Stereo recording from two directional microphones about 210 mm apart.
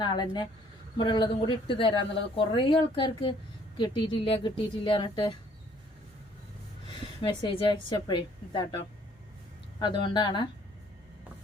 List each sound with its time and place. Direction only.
0.0 s a woman's voice: 20° left (ahead or behind)
7.7 s a woman's voice: 20° left (ahead or behind)
9.8 s a woman's voice: 20° left (ahead or behind)